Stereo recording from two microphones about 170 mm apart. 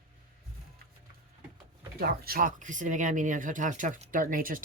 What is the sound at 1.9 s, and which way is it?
Speech, 65° right (ahead or behind).